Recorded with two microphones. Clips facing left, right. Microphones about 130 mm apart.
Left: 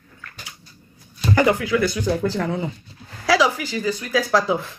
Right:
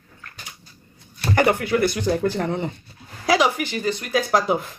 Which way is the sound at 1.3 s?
55° right (ahead or behind).